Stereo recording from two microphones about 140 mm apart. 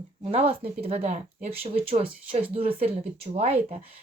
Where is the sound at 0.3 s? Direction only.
45° right (ahead or behind).